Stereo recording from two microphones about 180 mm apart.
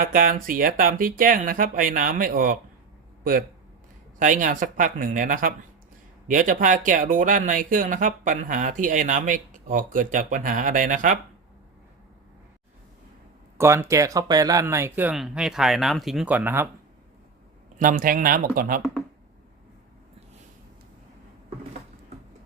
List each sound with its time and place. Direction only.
0.0 s speech: 50° right (ahead or behind)
4.2 s speech: 45° right (ahead or behind)
13.6 s speech: 15° right (ahead or behind)
17.7 s speech: 50° right (ahead or behind)